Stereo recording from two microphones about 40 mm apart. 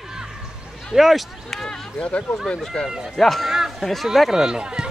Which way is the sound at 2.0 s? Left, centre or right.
Left.